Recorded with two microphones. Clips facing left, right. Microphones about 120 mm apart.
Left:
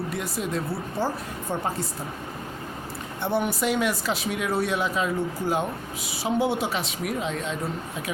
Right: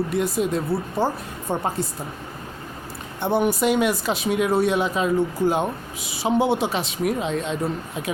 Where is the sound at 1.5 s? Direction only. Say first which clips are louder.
Right 4 dB; 55° right (ahead or behind).